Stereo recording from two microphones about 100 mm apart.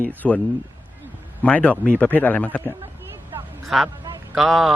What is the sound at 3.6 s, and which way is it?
Speech, centre (ahead or behind).